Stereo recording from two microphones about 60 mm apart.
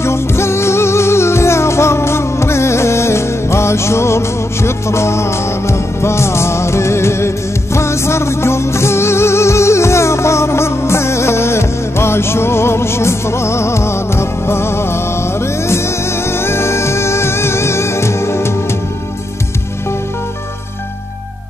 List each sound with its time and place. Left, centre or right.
0.0 s music: left